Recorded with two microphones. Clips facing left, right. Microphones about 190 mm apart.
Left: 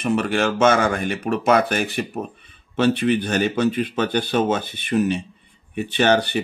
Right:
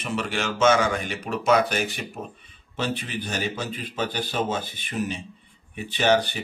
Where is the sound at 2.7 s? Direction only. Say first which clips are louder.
Left 11 dB; 65° left (ahead or behind).